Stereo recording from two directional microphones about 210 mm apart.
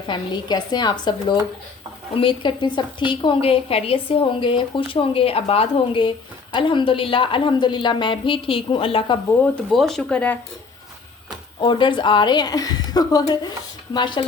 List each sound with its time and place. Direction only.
0.1 s a woman's voice: 20° left (ahead or behind)
2.1 s a woman's voice: 25° left (ahead or behind)
9.4 s speech: centre (ahead or behind)
11.6 s a woman's voice: 25° left (ahead or behind)